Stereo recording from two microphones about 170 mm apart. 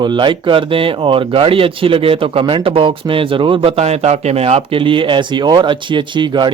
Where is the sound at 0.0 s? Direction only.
25° right (ahead or behind).